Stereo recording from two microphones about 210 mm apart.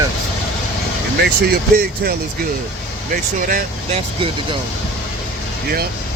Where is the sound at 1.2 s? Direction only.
50° right (ahead or behind).